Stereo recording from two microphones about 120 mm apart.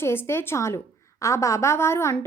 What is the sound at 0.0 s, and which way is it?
A woman's voice, 20° left (ahead or behind).